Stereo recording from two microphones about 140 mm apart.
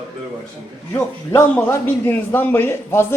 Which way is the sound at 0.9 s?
15° left (ahead or behind).